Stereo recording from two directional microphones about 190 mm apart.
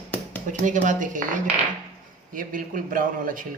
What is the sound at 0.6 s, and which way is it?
A man's voice, 40° right (ahead or behind).